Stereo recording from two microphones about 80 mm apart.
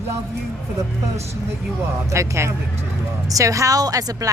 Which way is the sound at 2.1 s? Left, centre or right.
Right.